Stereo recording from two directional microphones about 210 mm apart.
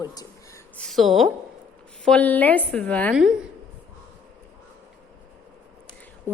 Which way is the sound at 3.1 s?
5° right (ahead or behind).